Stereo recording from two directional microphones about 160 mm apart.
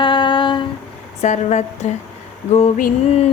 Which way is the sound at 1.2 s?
45° left (ahead or behind).